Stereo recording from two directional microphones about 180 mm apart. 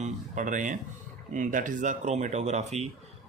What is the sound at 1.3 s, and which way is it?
Speech, 45° right (ahead or behind).